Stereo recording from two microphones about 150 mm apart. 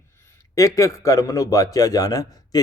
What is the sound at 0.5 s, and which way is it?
A man's voice, 20° left (ahead or behind).